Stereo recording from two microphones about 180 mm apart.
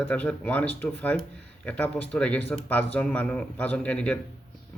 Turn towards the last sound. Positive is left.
turn(degrees=5)  # may be behind; listen again after turning